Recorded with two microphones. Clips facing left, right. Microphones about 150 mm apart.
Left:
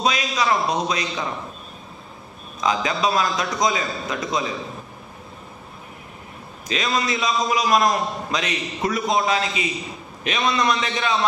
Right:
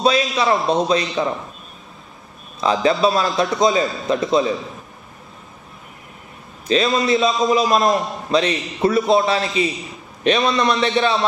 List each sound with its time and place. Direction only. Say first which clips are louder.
0.0 s a man's voice: right 5 dB; 30° right (ahead or behind)
2.6 s a man's voice: right 5 dB; 35° right (ahead or behind)
6.7 s a man's voice: right 7 dB; 30° right (ahead or behind)